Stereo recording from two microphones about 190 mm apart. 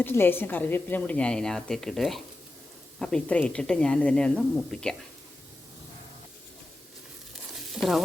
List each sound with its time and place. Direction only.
0.0 s speech: 10° left (ahead or behind)
7.5 s sizzle: centre (ahead or behind)